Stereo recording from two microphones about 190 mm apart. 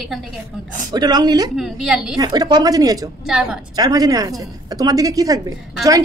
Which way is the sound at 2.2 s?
20° right (ahead or behind).